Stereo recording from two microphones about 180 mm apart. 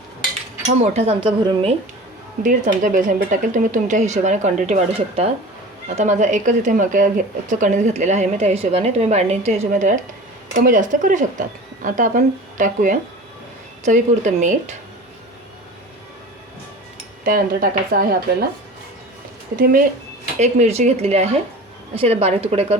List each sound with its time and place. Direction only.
0.8 s speech: 35° right (ahead or behind)
2.4 s speech: 45° right (ahead or behind)
17.2 s a woman's voice: 55° right (ahead or behind)
19.5 s a woman's voice: 55° right (ahead or behind)
20.4 s speech: 35° right (ahead or behind)